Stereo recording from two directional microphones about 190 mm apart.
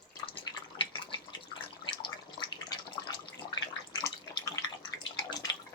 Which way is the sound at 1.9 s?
25° left (ahead or behind).